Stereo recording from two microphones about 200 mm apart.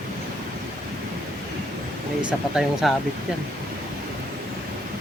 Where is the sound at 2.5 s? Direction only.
Centre (ahead or behind).